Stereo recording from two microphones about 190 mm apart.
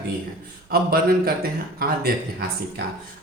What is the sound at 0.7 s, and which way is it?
A man's voice, 55° right (ahead or behind).